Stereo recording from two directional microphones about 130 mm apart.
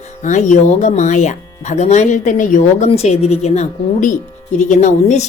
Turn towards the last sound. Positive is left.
turn(degrees=65)  # may be behind; listen again after turning